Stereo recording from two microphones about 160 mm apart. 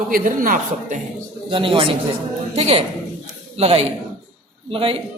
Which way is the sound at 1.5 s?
35° right (ahead or behind).